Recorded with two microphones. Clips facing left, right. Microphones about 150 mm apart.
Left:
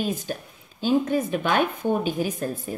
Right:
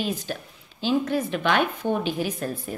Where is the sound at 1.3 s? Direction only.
40° left (ahead or behind).